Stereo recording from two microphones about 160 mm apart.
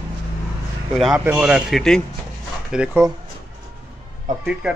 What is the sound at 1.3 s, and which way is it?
A man's voice, 5° right (ahead or behind).